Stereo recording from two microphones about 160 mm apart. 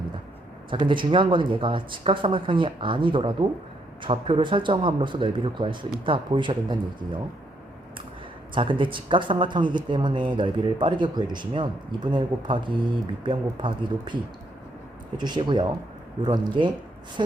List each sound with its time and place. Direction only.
0.7 s speech: 30° right (ahead or behind)
8.5 s speech: 30° right (ahead or behind)
15.2 s speech: 30° right (ahead or behind)